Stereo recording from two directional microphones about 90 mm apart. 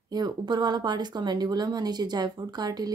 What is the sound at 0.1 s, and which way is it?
Speech, 55° right (ahead or behind).